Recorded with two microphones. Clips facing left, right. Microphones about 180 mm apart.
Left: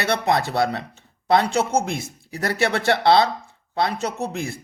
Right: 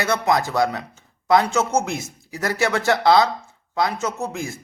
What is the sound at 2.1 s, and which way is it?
Speech, 60° left (ahead or behind).